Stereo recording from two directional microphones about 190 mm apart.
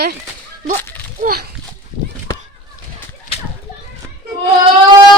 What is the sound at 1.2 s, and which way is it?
Speech, 50° right (ahead or behind).